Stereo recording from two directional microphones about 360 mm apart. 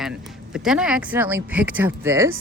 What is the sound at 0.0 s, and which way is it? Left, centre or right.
Speech, centre.